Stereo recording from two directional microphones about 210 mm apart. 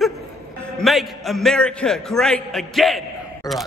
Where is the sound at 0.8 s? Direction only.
Centre (ahead or behind).